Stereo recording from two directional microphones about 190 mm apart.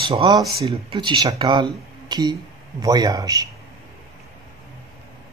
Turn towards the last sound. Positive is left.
turn(degrees=-20)  # may be behind; listen again after turning